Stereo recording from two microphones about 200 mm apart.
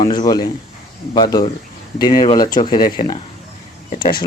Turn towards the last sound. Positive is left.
turn(degrees=25)  # may be behind; listen again after turning